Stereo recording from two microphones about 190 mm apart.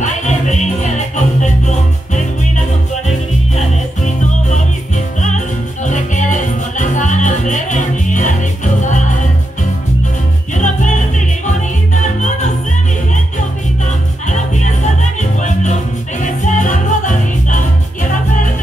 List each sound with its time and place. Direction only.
0.0 s music: 40° left (ahead or behind)
3.5 s music: 40° left (ahead or behind)
5.9 s music: 40° left (ahead or behind)
10.5 s music: 40° left (ahead or behind)
14.2 s music: 40° left (ahead or behind)